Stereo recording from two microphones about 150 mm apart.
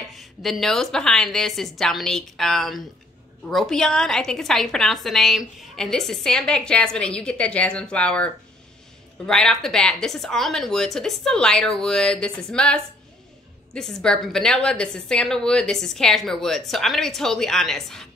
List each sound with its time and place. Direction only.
0.1 s a woman's voice: centre (ahead or behind)